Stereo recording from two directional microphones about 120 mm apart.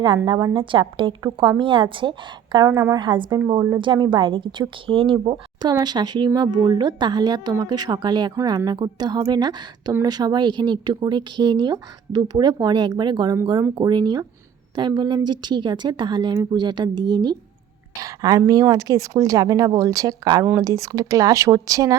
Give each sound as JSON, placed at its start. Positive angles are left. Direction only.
{"t": 0.5, "sound": "speech", "side_deg": -45}
{"t": 3.5, "sound": "speech", "side_deg": -30}
{"t": 3.8, "sound": "speech", "side_deg": -40}